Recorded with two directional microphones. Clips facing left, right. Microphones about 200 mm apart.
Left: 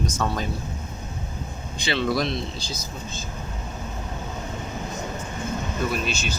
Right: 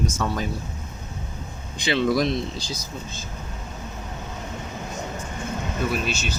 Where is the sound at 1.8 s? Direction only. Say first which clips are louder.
Right 3 dB; 15° right (ahead or behind).